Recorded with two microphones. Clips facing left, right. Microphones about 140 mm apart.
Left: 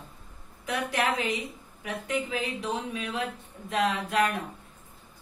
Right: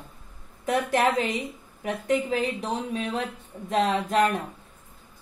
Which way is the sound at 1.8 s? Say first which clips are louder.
Right 6 dB; 40° right (ahead or behind).